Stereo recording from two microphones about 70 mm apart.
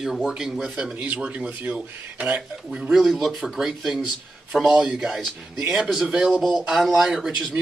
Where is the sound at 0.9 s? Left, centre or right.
Right.